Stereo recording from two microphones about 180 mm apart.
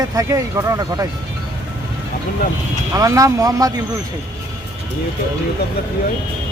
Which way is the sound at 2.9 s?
20° right (ahead or behind).